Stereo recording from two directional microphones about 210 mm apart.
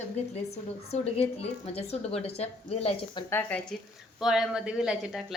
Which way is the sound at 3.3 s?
10° left (ahead or behind).